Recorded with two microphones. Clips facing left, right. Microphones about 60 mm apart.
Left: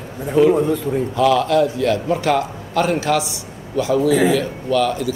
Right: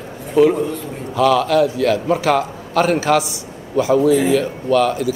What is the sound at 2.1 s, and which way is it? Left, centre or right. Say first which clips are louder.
A man's voice: right 2 dB; centre.